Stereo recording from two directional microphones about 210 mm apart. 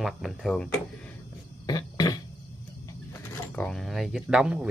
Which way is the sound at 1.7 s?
20° left (ahead or behind).